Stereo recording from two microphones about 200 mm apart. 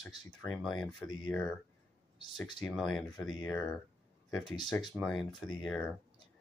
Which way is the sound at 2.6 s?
Centre (ahead or behind).